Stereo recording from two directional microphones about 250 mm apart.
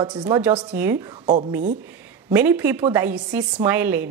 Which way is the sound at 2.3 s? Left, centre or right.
Centre.